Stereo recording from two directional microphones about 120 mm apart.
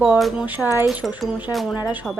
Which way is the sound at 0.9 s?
Centre (ahead or behind).